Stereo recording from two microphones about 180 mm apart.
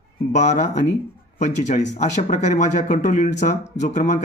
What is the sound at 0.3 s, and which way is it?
Speech, 40° left (ahead or behind).